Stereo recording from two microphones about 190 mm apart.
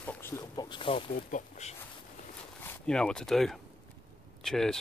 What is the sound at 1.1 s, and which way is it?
Speech, 45° left (ahead or behind).